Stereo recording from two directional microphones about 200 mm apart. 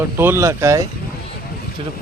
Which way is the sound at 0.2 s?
10° right (ahead or behind).